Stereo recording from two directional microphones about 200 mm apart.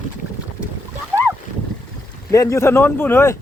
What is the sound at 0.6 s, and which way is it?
Splash, 5° right (ahead or behind).